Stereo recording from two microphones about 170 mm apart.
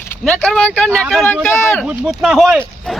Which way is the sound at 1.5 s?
15° left (ahead or behind).